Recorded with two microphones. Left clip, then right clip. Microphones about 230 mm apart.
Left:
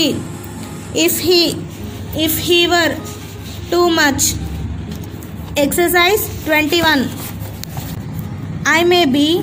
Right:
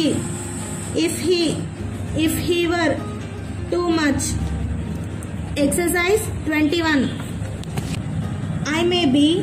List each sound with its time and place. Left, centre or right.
0.9 s a woman's voice: left
5.5 s a woman's voice: left
8.6 s a woman's voice: left